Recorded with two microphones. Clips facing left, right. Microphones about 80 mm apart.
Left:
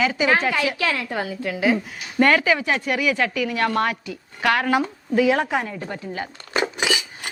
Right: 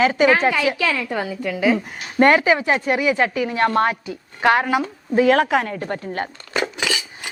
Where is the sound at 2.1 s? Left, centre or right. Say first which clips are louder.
Right 3 dB; right.